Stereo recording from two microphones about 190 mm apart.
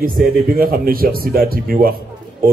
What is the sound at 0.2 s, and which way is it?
A man's voice, 50° right (ahead or behind).